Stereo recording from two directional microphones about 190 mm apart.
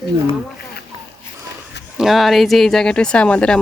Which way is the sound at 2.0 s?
Centre (ahead or behind).